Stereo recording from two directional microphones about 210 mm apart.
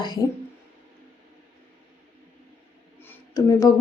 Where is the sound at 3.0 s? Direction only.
15° left (ahead or behind).